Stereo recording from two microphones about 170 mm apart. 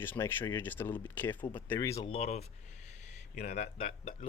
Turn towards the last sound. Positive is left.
turn(degrees=35)  # may be behind; listen again after turning